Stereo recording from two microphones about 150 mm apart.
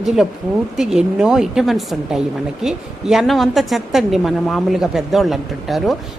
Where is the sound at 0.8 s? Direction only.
5° right (ahead or behind).